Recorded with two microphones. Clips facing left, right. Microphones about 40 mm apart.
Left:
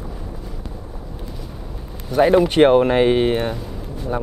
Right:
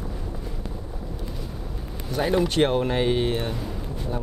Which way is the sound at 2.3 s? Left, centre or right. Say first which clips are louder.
Left 8 dB; left.